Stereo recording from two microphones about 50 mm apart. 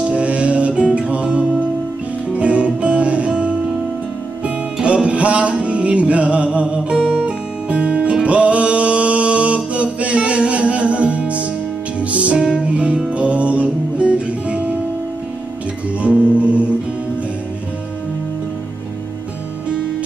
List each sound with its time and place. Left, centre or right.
0.0 s music: right
4.7 s music: right
12.4 s music: centre
16.0 s music: right